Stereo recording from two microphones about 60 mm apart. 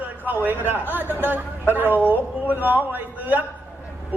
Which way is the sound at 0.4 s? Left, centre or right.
Right.